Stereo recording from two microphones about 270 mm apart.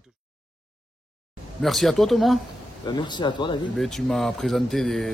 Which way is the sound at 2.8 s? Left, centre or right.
Centre.